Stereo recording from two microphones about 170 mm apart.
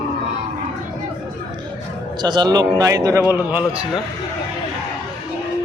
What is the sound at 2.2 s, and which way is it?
A man's voice, 25° right (ahead or behind).